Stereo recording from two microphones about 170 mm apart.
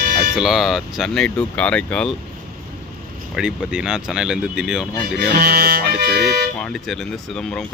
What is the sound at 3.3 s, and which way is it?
Speech, 5° right (ahead or behind).